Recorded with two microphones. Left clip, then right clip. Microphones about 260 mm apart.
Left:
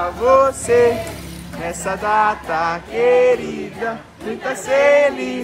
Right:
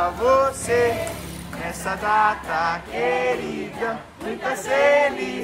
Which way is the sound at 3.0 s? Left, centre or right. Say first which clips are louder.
Left 9 dB; centre.